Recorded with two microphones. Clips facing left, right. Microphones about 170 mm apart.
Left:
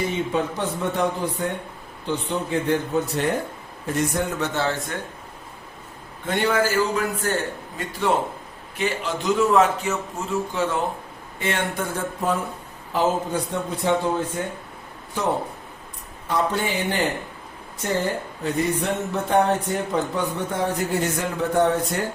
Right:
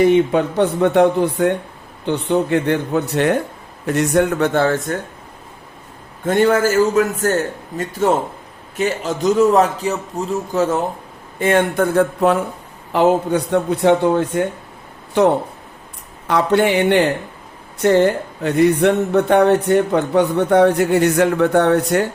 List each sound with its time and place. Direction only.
0.0 s a man's voice: 65° right (ahead or behind); by 4.9 s 45° right (ahead or behind)
6.2 s a man's voice: 45° right (ahead or behind); by 14.4 s 70° right (ahead or behind)
16.2 s speech: 75° right (ahead or behind)